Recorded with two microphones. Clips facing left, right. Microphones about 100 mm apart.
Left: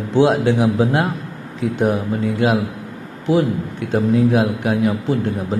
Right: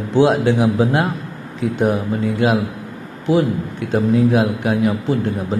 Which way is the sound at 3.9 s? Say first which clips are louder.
Even; 25° right (ahead or behind).